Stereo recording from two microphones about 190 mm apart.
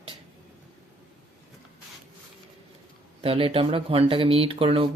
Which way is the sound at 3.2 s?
30° right (ahead or behind).